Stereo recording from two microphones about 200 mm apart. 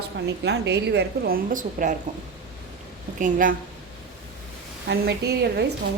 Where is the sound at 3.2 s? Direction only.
45° right (ahead or behind).